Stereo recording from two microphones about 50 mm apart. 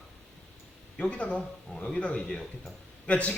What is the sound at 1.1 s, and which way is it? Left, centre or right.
A man's voice, left.